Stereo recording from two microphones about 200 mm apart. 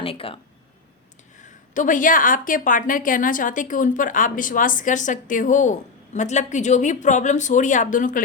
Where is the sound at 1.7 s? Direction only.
40° left (ahead or behind).